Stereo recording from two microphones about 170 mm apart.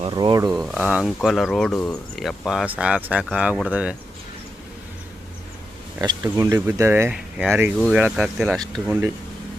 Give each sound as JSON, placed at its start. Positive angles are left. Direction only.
{"t": 0.0, "sound": "speech", "side_deg": -25}
{"t": 0.5, "sound": "speech", "side_deg": -5}
{"t": 6.0, "sound": "speech", "side_deg": -20}